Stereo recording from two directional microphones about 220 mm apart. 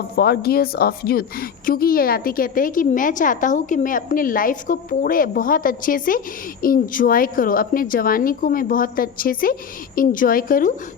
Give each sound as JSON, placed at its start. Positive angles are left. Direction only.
{"t": 0.2, "sound": "a woman's voice", "side_deg": 45}